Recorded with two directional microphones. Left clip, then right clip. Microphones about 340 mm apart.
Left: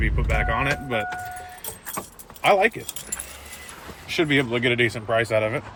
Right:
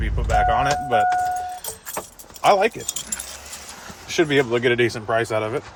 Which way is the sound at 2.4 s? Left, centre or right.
Centre.